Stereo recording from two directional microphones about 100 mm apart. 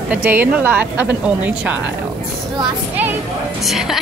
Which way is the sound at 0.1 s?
15° right (ahead or behind).